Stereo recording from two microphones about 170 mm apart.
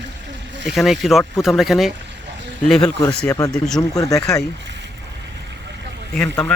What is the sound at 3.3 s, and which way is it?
Speech, 20° left (ahead or behind).